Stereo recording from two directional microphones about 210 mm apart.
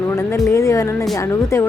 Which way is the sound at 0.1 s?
10° left (ahead or behind).